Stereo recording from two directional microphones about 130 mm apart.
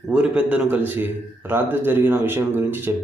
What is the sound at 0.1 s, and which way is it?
Speech, 10° right (ahead or behind).